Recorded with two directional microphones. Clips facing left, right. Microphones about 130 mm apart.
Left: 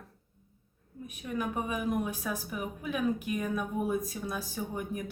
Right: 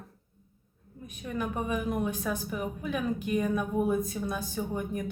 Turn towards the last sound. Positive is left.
turn(degrees=5)  # may be behind; listen again after turning